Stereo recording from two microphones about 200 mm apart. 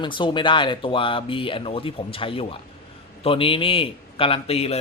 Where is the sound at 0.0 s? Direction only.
25° left (ahead or behind).